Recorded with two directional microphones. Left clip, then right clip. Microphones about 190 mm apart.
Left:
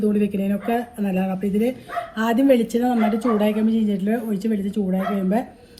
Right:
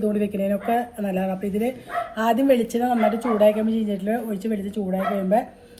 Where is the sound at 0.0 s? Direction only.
20° left (ahead or behind).